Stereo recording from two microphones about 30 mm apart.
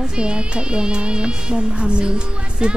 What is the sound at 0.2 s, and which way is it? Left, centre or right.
Speech, right.